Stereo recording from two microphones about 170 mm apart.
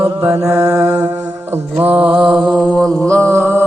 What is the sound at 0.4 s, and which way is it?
Mantra, 15° right (ahead or behind).